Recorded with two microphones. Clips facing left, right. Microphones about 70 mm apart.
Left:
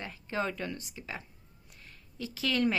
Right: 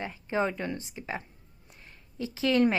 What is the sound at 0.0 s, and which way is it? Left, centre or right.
Speech, right.